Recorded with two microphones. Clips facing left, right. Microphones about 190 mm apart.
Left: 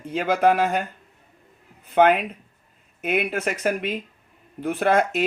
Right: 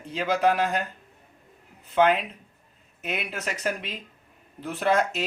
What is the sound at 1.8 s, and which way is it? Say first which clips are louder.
Speech: left 4 dB; 55° left (ahead or behind).